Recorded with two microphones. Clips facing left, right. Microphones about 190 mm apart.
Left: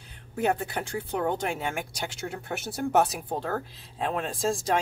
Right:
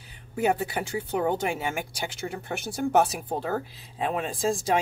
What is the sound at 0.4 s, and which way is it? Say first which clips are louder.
Speech: right 2 dB; 10° right (ahead or behind).